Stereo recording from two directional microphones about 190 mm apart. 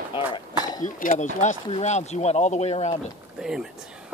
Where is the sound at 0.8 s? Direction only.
45° left (ahead or behind).